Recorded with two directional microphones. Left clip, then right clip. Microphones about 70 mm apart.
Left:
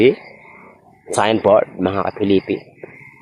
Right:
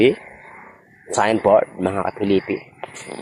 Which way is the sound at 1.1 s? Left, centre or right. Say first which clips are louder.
Left 2 dB; left.